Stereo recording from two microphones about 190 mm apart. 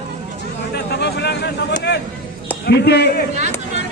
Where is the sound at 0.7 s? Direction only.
60° left (ahead or behind).